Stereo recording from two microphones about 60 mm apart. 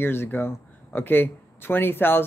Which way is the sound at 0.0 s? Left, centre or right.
Left.